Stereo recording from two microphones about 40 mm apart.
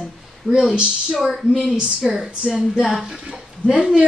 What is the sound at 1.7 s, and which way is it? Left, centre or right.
Speech, centre.